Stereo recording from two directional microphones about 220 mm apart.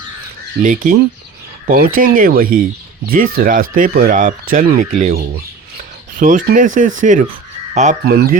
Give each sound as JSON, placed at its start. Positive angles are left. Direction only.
{"t": 0.6, "sound": "speech", "side_deg": -40}
{"t": 8.0, "sound": "speech", "side_deg": -45}